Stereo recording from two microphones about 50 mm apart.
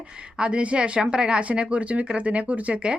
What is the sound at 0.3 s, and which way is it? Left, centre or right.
Speech, right.